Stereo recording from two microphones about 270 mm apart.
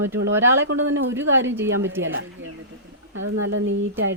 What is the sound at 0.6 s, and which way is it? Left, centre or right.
Speech, right.